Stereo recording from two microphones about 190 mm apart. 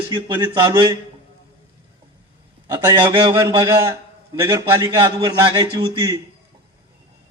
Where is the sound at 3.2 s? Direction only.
15° right (ahead or behind).